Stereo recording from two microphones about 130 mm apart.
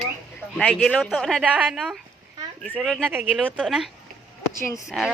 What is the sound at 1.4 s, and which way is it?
Speech, 10° right (ahead or behind).